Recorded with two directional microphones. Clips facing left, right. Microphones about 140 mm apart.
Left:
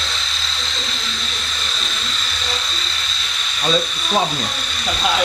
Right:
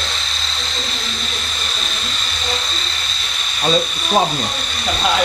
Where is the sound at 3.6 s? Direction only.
25° right (ahead or behind).